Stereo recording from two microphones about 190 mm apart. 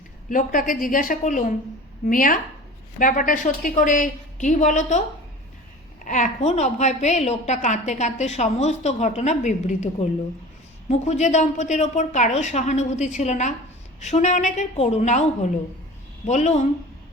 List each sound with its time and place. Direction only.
0.3 s a woman's voice: 45° left (ahead or behind)
6.1 s a woman's voice: 40° left (ahead or behind)